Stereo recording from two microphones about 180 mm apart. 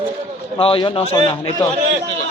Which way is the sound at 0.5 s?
30° left (ahead or behind).